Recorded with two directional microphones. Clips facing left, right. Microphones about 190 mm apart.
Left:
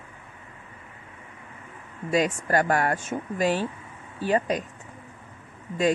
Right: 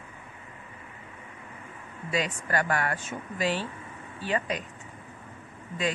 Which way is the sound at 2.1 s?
45° left (ahead or behind).